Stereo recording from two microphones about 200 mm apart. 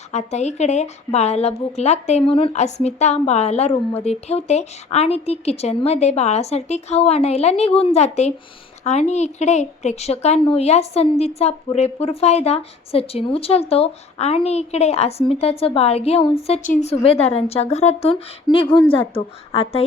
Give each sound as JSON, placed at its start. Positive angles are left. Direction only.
{"t": 0.1, "sound": "a woman's voice", "side_deg": 35}